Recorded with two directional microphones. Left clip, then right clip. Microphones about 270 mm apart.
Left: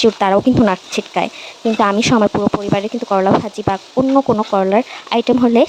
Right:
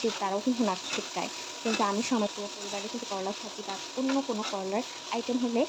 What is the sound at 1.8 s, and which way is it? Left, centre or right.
Speech, left.